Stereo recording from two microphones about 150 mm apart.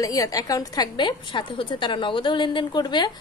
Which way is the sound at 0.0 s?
20° left (ahead or behind).